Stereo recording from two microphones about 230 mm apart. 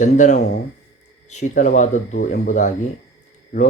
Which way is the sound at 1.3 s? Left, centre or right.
Left.